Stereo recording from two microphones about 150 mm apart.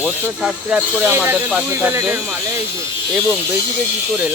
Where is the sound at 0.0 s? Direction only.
10° right (ahead or behind).